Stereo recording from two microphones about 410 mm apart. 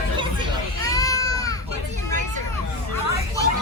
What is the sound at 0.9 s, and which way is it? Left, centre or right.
Baby cry, centre.